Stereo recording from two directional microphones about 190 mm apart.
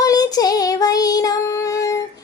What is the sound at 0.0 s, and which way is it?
Child singing, 20° left (ahead or behind).